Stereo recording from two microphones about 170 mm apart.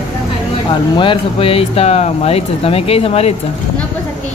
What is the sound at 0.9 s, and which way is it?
Speech, 30° left (ahead or behind).